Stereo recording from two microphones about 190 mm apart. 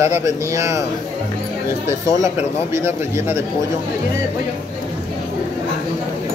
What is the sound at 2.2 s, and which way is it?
Speech, 15° right (ahead or behind).